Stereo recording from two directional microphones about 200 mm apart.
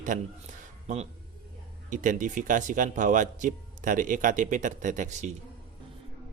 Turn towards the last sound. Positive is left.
turn(degrees=-35)  # may be behind; listen again after turning